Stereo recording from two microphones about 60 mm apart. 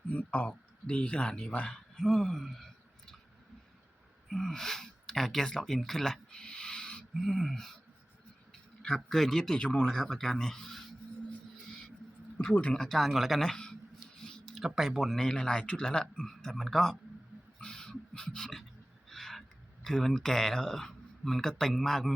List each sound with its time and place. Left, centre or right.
0.1 s speech: left
2.0 s speech: centre
4.3 s speech: centre
9.0 s speech: centre
12.7 s speech: centre
14.2 s a sound: centre
14.5 s speech: centre
17.6 s a sound: centre
19.0 s speech: centre